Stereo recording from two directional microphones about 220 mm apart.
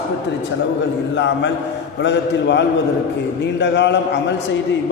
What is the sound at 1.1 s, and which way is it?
A man's voice, 55° left (ahead or behind).